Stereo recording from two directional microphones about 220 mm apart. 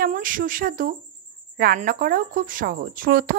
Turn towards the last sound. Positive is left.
turn(degrees=-40)  # may be behind; listen again after turning